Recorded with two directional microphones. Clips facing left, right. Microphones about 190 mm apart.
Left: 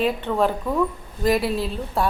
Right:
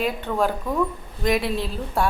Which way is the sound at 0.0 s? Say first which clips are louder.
Left 2 dB; centre (ahead or behind).